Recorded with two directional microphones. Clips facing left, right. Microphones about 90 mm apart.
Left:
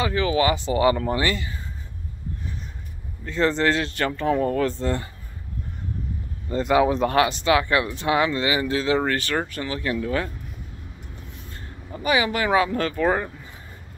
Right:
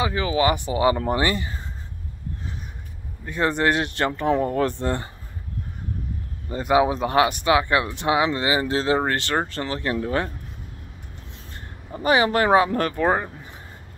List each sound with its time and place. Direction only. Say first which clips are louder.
0.0 s speech: even; 20° right (ahead or behind)
3.3 s speech: even; 15° right (ahead or behind)
6.5 s speech: even; 15° right (ahead or behind); by 10.3 s 30° right (ahead or behind)
12.0 s speech: right 3 dB; 30° right (ahead or behind)